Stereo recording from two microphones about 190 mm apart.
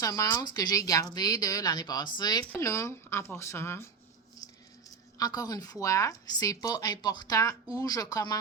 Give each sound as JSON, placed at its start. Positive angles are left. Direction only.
{"t": 0.0, "sound": "speech", "side_deg": 15}
{"t": 5.1, "sound": "speech", "side_deg": 20}